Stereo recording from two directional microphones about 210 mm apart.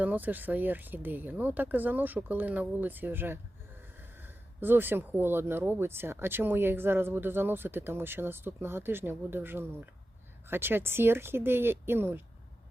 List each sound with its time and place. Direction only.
0.0 s speech: 10° right (ahead or behind)